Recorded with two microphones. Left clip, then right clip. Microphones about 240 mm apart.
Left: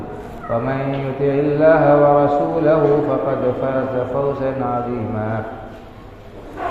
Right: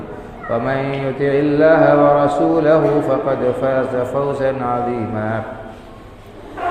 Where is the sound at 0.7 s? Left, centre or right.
Right.